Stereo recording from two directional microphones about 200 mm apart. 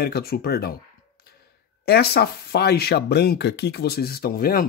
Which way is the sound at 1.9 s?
55° left (ahead or behind).